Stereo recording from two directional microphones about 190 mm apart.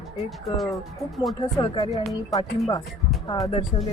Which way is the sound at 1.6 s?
20° left (ahead or behind).